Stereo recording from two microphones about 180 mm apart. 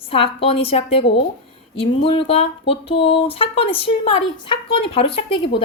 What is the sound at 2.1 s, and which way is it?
A woman's voice, 30° left (ahead or behind).